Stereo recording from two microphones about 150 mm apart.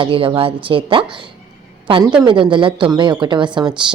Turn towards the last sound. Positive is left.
turn(degrees=-30)  # may be behind; listen again after turning